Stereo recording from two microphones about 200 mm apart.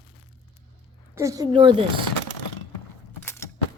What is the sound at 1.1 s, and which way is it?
Speech, 15° right (ahead or behind).